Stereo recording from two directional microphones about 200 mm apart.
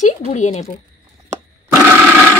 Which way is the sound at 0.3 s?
35° left (ahead or behind).